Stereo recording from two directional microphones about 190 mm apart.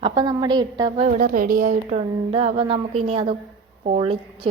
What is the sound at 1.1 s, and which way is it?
A woman's voice, 45° right (ahead or behind).